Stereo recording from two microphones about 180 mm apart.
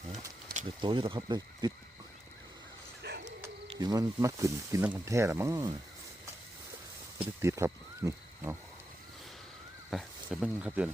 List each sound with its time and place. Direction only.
0.8 s speech: 25° right (ahead or behind)
3.0 s a sound: 70° right (ahead or behind)
3.8 s speech: 20° right (ahead or behind)
7.2 s speech: 15° right (ahead or behind)
9.9 s speech: centre (ahead or behind)